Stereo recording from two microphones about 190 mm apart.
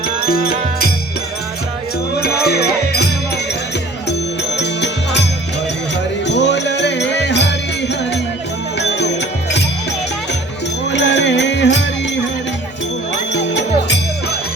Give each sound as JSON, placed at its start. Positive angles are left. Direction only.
{"t": 2.2, "sound": "music", "side_deg": 60}
{"t": 4.5, "sound": "music", "side_deg": 65}
{"t": 8.8, "sound": "music", "side_deg": 65}
{"t": 10.9, "sound": "music", "side_deg": 65}
{"t": 13.3, "sound": "music", "side_deg": 70}